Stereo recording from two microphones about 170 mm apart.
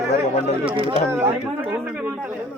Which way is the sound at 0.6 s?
30° right (ahead or behind).